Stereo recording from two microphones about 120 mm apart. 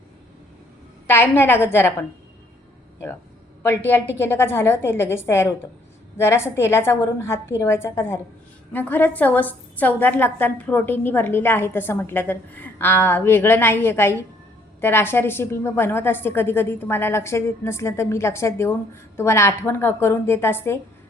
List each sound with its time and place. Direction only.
1.0 s a woman's voice: 20° left (ahead or behind)
4.2 s a woman's voice: 20° left (ahead or behind)